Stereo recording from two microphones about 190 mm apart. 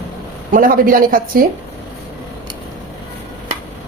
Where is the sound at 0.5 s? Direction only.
45° right (ahead or behind).